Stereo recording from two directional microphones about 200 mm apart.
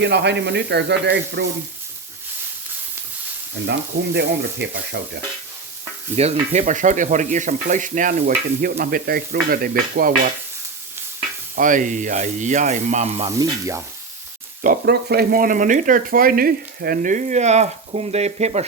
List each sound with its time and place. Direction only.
0.0 s frying: 55° right (ahead or behind)
3.7 s frying: 55° right (ahead or behind)
6.2 s speech: 30° right (ahead or behind)
8.6 s music: 45° right (ahead or behind)
11.5 s speech: 40° right (ahead or behind)
13.4 s sizzle: 15° right (ahead or behind)
14.6 s speech: 50° right (ahead or behind)